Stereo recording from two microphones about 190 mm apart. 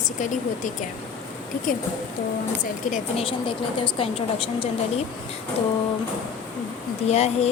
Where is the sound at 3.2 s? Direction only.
30° left (ahead or behind).